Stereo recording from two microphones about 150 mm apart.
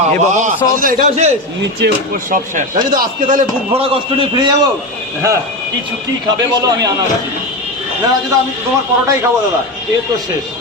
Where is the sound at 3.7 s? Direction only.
40° right (ahead or behind).